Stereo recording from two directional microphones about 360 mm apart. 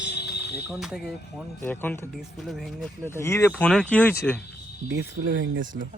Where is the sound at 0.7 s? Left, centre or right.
Centre.